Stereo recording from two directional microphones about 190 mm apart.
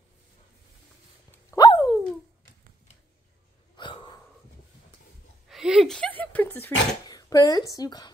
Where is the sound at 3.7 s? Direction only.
25° left (ahead or behind).